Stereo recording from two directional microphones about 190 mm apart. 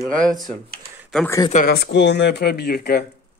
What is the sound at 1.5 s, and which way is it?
Speech, 50° left (ahead or behind).